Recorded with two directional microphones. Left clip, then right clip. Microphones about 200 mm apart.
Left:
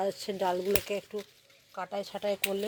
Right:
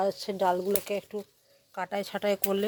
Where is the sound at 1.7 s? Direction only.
30° right (ahead or behind).